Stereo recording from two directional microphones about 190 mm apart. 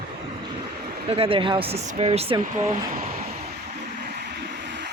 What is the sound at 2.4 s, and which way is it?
Speech, 40° right (ahead or behind).